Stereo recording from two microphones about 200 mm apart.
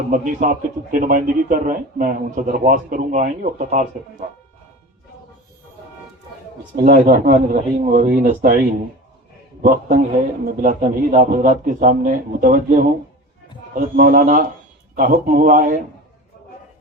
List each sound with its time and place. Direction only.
0.1 s a man's voice: 45° right (ahead or behind)
6.7 s a man's voice: 45° right (ahead or behind)
13.7 s a man's voice: 45° right (ahead or behind)